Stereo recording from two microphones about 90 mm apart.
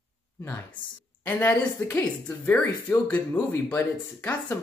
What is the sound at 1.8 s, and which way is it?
Speech, 20° left (ahead or behind).